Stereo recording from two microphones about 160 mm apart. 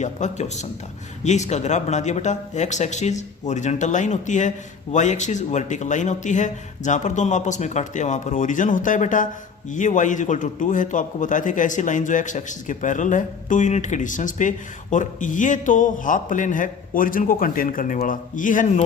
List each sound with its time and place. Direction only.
0.0 s speech: 45° left (ahead or behind)